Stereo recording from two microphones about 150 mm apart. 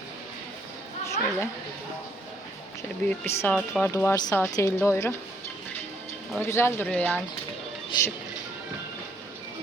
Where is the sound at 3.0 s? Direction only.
10° left (ahead or behind).